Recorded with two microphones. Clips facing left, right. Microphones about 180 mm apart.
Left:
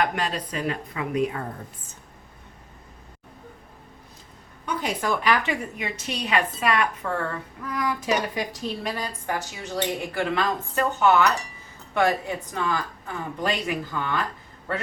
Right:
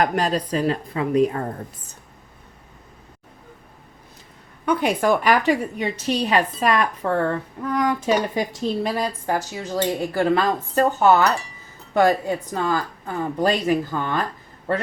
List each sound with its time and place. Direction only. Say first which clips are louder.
0.0 s a woman's voice: right 5 dB; 40° right (ahead or behind)
4.6 s a woman's voice: right 8 dB; 60° right (ahead or behind); by 11.3 s 35° right (ahead or behind)
12.5 s a woman's voice: right 1 dB; 40° right (ahead or behind)